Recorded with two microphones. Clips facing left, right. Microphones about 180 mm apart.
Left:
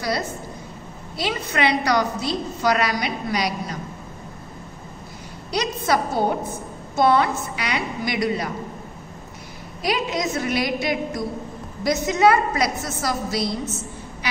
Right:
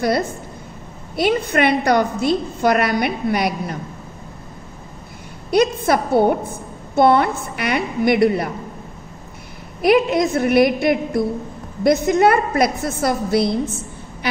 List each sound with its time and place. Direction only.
0.0 s a woman's voice: 55° right (ahead or behind)
5.5 s a woman's voice: 55° right (ahead or behind)
9.8 s a woman's voice: 55° right (ahead or behind)